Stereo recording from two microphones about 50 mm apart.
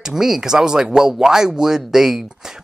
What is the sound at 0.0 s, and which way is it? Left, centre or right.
Speech, centre.